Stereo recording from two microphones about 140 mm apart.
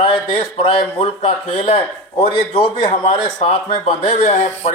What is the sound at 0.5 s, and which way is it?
Speech, 45° left (ahead or behind).